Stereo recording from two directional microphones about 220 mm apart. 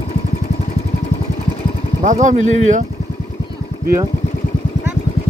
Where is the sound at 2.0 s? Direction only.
35° right (ahead or behind).